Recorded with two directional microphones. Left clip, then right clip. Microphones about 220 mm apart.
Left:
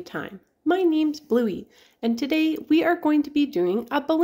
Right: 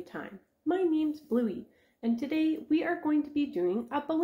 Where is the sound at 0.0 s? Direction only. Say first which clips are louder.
Left 8 dB; 40° left (ahead or behind).